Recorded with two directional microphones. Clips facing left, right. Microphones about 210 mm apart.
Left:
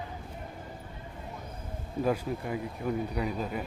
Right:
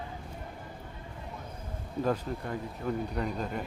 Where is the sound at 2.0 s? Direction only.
10° left (ahead or behind).